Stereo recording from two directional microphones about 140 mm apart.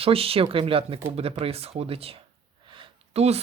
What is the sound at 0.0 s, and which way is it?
Speech, 45° right (ahead or behind).